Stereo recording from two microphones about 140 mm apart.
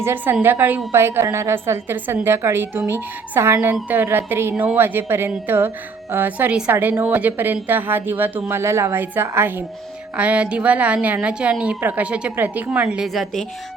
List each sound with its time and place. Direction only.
0.0 s a woman's voice: 15° right (ahead or behind)